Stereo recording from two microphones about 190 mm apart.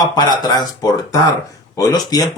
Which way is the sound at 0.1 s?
20° left (ahead or behind).